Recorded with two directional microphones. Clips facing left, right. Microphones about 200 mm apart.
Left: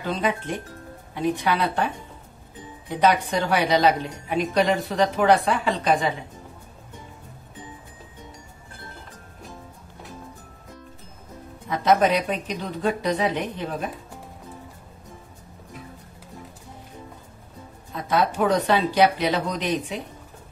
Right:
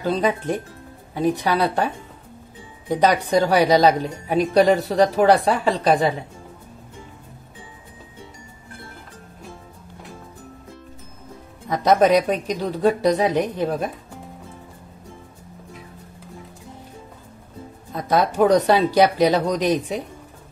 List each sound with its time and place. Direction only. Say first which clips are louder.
0.0 s a woman's voice: right 5 dB; 40° right (ahead or behind)
2.9 s a woman's voice: right 3 dB; 40° right (ahead or behind)
11.7 s a woman's voice: right 4 dB; 40° right (ahead or behind)
17.9 s a woman's voice: right 4 dB; 40° right (ahead or behind)